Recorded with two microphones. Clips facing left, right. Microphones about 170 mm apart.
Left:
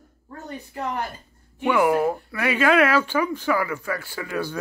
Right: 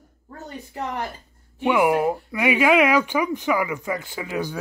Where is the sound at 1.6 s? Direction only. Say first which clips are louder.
Even; 15° right (ahead or behind).